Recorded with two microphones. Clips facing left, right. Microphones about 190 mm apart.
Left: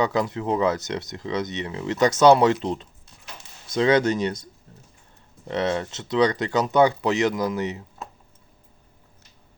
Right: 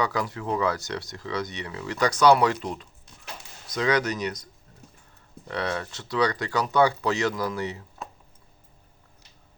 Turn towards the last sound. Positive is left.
turn(degrees=20)  # may be behind; listen again after turning